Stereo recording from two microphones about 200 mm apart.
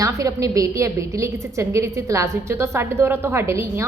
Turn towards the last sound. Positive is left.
turn(degrees=-15)  # may be behind; listen again after turning